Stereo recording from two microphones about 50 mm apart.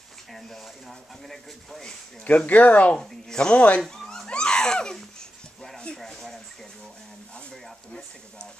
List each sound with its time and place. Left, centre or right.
0.3 s speech: centre
2.2 s speech: left
3.0 s speech: centre
3.5 s speech: left
4.1 s a sound: centre
5.9 s speech: centre